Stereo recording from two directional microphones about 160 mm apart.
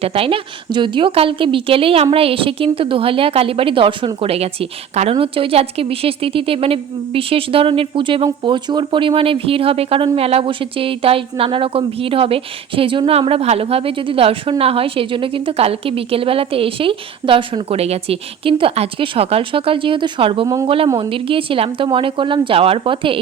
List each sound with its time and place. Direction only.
0.0 s a woman's voice: 35° right (ahead or behind)